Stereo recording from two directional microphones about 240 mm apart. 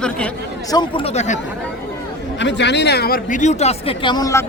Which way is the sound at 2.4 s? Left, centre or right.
Left.